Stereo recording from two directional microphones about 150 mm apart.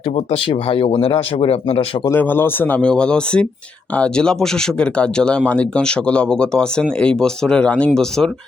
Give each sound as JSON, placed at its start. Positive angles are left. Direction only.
{"t": 0.7, "sound": "speech", "side_deg": 35}
{"t": 2.0, "sound": "speech", "side_deg": 15}